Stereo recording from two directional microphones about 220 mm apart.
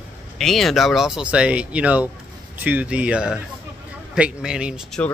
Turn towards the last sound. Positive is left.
turn(degrees=-5)  # may be behind; listen again after turning